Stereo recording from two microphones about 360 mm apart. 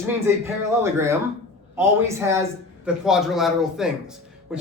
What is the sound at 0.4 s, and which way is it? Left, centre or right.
A man's voice, centre.